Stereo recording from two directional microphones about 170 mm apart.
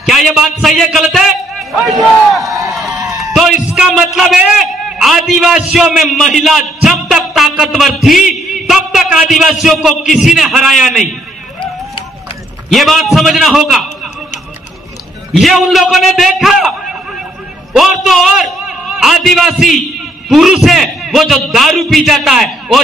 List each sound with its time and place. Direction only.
0.0 s a man's voice: centre (ahead or behind)
2.9 s a sound: 20° right (ahead or behind)
3.2 s a man's voice: centre (ahead or behind)
12.7 s a man's voice: centre (ahead or behind)
15.3 s a man's voice: centre (ahead or behind)
17.7 s a man's voice: centre (ahead or behind)